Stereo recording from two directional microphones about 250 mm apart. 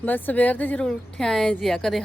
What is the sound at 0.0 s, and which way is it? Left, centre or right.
A woman's voice, centre.